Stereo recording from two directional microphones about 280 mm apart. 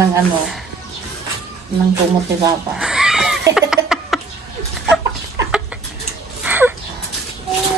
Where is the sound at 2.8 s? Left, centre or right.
Centre.